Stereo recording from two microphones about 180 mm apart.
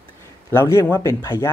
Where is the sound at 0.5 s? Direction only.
15° left (ahead or behind).